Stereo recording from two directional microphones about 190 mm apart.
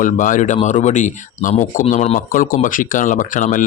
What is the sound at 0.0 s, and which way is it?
Speech, 45° left (ahead or behind).